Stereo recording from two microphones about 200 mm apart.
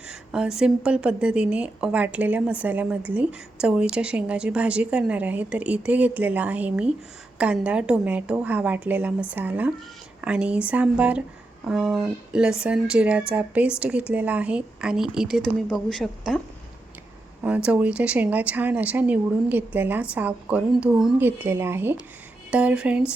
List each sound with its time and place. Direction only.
0.1 s a woman's voice: 5° right (ahead or behind)
17.4 s a woman's voice: 5° right (ahead or behind)